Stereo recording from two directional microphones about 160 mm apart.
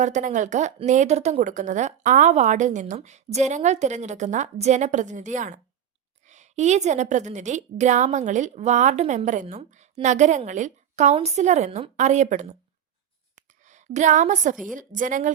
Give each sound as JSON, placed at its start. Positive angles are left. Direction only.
{"t": 0.0, "sound": "a woman's voice", "side_deg": -50}
{"t": 13.3, "sound": "a sound", "side_deg": -50}
{"t": 14.5, "sound": "a woman's voice", "side_deg": 0}
{"t": 14.8, "sound": "a woman's voice", "side_deg": -55}